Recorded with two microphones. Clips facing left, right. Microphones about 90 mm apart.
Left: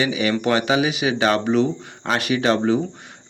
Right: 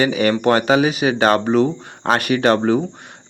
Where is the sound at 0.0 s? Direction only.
50° right (ahead or behind).